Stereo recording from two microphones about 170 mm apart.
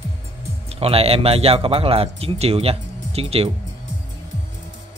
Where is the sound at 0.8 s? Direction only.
35° right (ahead or behind).